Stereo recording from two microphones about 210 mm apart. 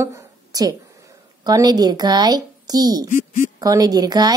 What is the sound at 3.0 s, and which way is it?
Speech, 40° left (ahead or behind).